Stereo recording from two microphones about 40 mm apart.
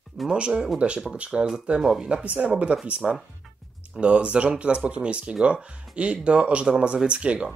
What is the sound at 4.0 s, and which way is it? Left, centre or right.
Speech, right.